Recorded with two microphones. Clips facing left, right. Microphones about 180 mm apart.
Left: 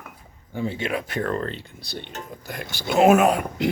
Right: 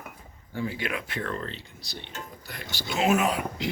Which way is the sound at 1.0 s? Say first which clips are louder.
Left 7 dB; 40° left (ahead or behind).